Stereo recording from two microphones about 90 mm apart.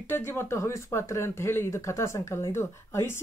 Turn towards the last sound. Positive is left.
turn(degrees=30)  # may be behind; listen again after turning